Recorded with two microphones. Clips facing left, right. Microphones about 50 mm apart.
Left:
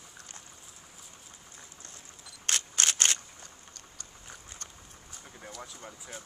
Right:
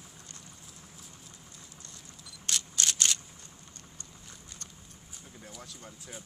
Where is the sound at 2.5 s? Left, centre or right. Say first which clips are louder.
Left 2 dB; left.